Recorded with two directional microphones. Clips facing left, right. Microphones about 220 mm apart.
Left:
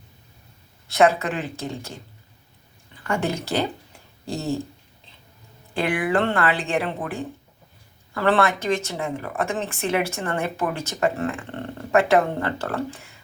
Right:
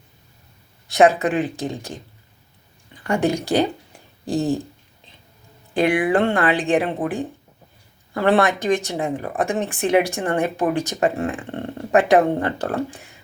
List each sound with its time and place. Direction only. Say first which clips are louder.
0.9 s speech: right 3 dB; 15° right (ahead or behind)
3.0 s speech: right 5 dB; 15° right (ahead or behind)
5.7 s speech: right 4 dB; 15° right (ahead or behind)
8.1 s speech: right 3 dB; 15° right (ahead or behind)